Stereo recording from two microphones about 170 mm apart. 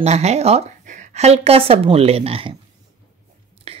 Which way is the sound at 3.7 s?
35° right (ahead or behind).